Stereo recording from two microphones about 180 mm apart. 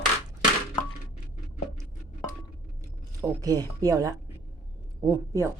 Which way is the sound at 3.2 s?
20° right (ahead or behind).